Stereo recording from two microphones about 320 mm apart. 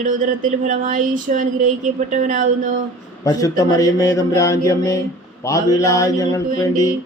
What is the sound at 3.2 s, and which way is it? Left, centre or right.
Speech, centre.